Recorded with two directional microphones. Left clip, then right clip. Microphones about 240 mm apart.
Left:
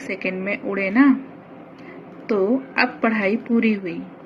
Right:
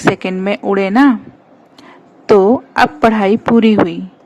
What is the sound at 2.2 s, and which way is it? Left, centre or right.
A woman's voice, right.